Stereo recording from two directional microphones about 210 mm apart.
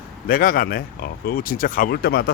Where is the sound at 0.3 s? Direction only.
40° left (ahead or behind).